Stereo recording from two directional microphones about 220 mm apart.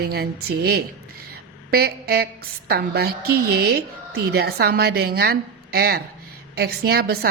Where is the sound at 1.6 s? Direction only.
45° right (ahead or behind).